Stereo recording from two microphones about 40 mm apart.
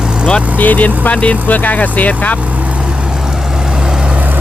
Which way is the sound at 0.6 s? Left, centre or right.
Left.